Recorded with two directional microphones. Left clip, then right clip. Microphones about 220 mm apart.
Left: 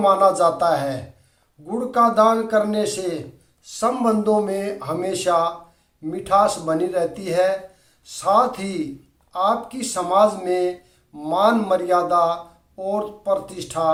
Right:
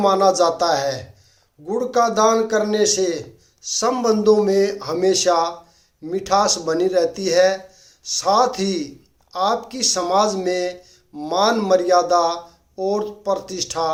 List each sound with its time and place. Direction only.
0.0 s speech: 45° right (ahead or behind)